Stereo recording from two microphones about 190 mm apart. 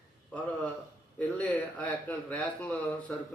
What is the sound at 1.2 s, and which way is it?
A man's voice, 10° left (ahead or behind).